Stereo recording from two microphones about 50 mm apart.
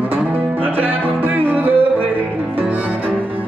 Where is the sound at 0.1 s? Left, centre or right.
Right.